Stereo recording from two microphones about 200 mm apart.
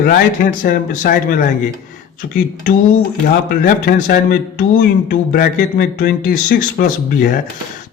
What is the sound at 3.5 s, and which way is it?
Speech, 45° left (ahead or behind).